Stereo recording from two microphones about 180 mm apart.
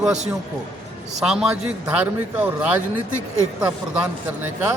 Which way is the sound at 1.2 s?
5° right (ahead or behind).